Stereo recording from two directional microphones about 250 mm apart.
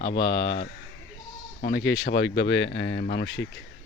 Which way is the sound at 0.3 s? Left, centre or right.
Left.